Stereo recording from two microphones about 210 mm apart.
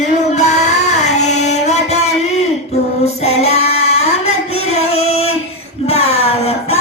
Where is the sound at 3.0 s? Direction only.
30° left (ahead or behind).